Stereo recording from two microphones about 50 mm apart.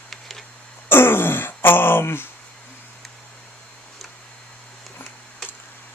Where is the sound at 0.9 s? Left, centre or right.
Left.